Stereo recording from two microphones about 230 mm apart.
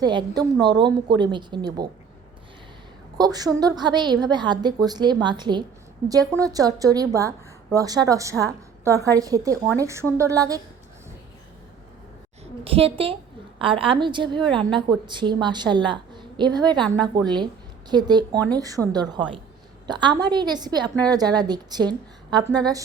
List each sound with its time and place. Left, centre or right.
0.0 s a woman's voice: centre
3.2 s a woman's voice: centre
12.6 s a woman's voice: right
14.4 s a woman's voice: centre
15.0 s a woman's voice: centre